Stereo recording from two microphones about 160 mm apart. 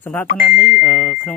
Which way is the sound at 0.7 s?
10° left (ahead or behind).